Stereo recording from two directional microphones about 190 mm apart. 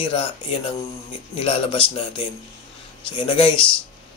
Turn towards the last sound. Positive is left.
turn(degrees=25)  # may be behind; listen again after turning